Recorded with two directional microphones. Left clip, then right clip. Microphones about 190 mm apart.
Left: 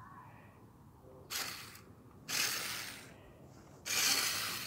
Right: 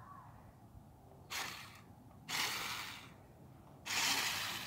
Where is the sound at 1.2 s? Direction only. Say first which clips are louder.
Left 2 dB; 25° left (ahead or behind).